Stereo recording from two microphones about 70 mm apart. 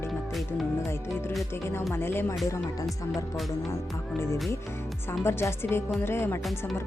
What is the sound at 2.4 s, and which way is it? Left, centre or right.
Speech, left.